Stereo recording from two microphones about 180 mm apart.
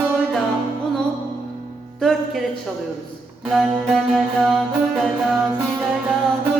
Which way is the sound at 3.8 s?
Centre (ahead or behind).